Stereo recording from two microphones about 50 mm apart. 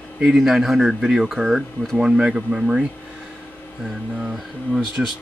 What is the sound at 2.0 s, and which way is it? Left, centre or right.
Speech, centre.